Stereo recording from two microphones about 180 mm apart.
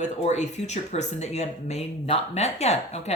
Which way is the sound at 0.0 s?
40° left (ahead or behind).